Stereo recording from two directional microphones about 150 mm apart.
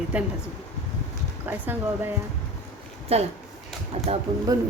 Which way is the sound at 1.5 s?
15° right (ahead or behind).